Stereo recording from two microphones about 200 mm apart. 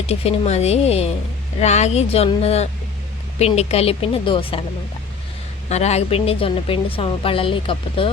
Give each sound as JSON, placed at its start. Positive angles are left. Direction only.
{"t": 0.1, "sound": "speech", "side_deg": 30}
{"t": 5.6, "sound": "speech", "side_deg": 35}